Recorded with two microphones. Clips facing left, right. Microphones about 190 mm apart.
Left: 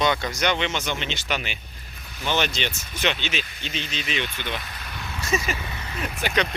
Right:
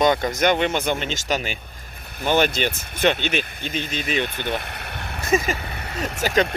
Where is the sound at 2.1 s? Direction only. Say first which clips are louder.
Right 6 dB; 55° right (ahead or behind).